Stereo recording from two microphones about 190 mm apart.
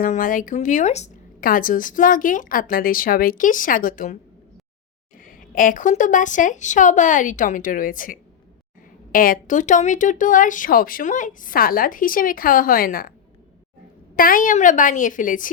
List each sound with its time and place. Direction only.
0.0 s a woman's voice: 45° left (ahead or behind)
14.2 s a woman's voice: 45° left (ahead or behind)